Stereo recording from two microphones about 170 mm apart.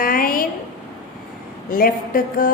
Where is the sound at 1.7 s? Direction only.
55° left (ahead or behind).